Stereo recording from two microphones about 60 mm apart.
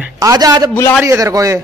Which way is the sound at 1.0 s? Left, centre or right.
Right.